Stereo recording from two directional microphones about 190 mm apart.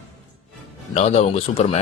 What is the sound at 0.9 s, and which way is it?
Speech, 35° left (ahead or behind).